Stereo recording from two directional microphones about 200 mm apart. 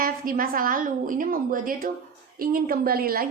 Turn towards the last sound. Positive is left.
turn(degrees=-50)  # may be behind; listen again after turning